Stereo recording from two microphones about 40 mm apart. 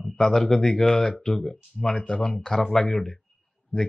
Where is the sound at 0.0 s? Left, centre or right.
Centre.